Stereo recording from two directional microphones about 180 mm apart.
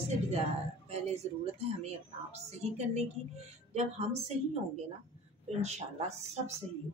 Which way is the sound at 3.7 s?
35° right (ahead or behind).